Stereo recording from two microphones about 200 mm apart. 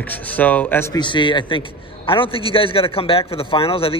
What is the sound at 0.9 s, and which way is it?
A man's voice, 25° left (ahead or behind).